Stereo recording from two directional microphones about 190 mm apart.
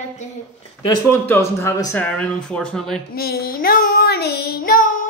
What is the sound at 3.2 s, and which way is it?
Child singing, 55° left (ahead or behind).